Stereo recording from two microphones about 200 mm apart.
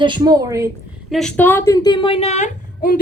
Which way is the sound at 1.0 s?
Centre (ahead or behind).